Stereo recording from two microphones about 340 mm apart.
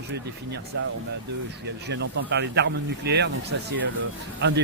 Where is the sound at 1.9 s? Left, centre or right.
Right.